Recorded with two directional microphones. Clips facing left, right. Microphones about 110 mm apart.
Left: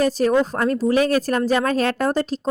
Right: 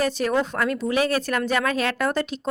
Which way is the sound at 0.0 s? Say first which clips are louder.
Left 5 dB; 40° left (ahead or behind).